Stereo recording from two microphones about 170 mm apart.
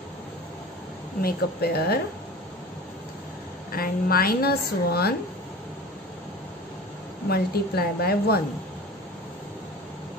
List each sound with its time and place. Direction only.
1.2 s speech: 70° left (ahead or behind)
3.7 s a woman's voice: 60° left (ahead or behind)
7.2 s a woman's voice: 65° left (ahead or behind)